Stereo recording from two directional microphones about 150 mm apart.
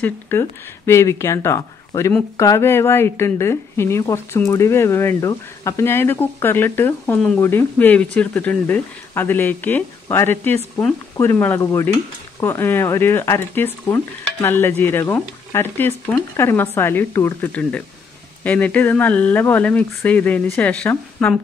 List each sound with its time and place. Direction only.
0.0 s a woman's voice: 15° left (ahead or behind)